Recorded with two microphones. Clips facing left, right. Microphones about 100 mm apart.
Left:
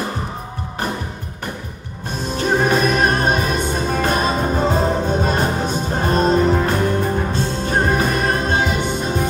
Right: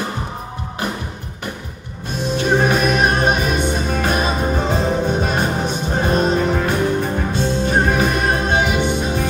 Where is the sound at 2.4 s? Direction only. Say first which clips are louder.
Even; 45° left (ahead or behind).